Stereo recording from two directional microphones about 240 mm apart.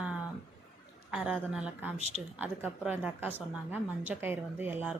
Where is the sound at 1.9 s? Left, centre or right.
Right.